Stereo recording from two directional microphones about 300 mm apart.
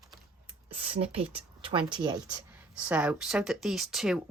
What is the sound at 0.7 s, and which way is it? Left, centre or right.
Speech, centre.